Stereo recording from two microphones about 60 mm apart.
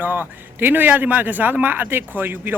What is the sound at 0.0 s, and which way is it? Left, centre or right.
A man's voice, right.